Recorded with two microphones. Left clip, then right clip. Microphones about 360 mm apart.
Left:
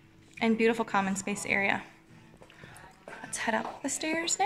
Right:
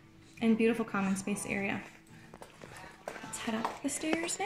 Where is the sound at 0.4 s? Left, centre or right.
Centre.